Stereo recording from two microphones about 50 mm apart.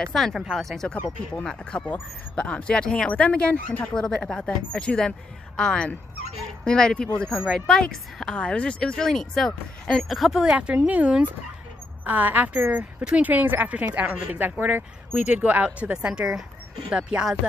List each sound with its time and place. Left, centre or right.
0.1 s speech: centre
1.4 s speech: centre
2.8 s speech: centre
8.4 s speech: left
10.1 s speech: centre
10.4 s a woman's voice: right
15.1 s speech: right
16.1 s speech: centre